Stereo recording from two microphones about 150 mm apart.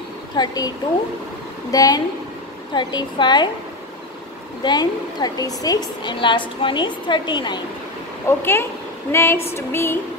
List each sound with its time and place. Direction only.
0.4 s a woman's voice: 25° left (ahead or behind)
4.6 s a woman's voice: 25° left (ahead or behind)
8.3 s female singing: 15° left (ahead or behind)